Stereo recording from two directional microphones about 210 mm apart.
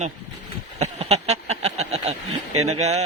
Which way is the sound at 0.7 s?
30° right (ahead or behind).